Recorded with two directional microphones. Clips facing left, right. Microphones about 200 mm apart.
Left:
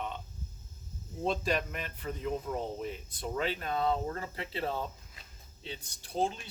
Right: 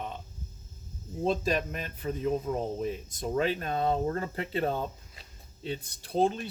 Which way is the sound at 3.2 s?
45° right (ahead or behind).